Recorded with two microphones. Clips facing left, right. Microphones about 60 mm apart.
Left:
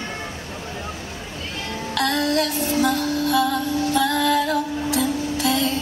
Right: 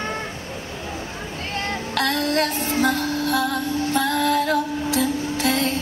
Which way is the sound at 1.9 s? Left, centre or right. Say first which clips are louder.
Left 1 dB; right.